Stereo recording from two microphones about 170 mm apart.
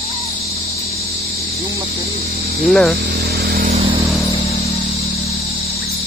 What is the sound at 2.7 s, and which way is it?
Speech, centre (ahead or behind).